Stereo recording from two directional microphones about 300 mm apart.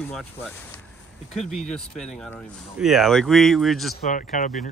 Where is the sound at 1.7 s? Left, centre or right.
Centre.